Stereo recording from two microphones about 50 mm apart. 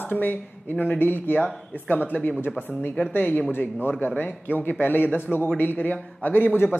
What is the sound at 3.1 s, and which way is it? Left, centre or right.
A man's voice, left.